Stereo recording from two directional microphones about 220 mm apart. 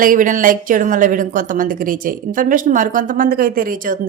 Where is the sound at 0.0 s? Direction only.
40° right (ahead or behind).